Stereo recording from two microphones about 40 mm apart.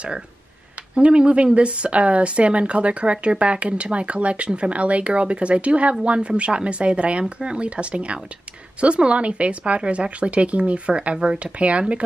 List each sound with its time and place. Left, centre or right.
0.9 s speech: right